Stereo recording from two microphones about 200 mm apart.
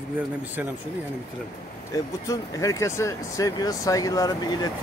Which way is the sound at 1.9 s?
15° left (ahead or behind).